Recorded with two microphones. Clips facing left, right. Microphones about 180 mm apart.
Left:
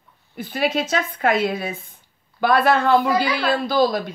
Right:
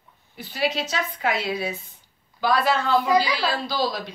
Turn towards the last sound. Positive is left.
turn(degrees=50)  # may be behind; listen again after turning